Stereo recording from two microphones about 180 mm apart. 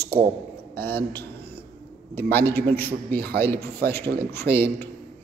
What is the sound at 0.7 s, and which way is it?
Speech, 10° left (ahead or behind).